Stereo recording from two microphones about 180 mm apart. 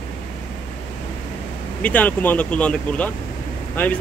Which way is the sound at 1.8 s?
10° left (ahead or behind).